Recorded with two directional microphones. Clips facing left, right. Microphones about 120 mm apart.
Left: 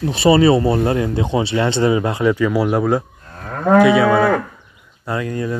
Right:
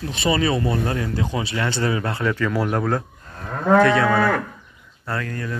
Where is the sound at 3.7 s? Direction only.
10° left (ahead or behind).